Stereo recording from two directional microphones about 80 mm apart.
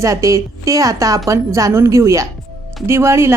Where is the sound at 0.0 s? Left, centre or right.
Right.